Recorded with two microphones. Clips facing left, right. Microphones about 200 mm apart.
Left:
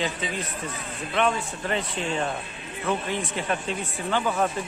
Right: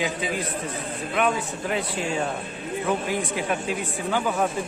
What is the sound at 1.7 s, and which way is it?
Speech, 5° right (ahead or behind).